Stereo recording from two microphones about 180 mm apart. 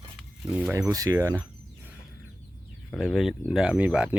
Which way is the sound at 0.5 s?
5° right (ahead or behind).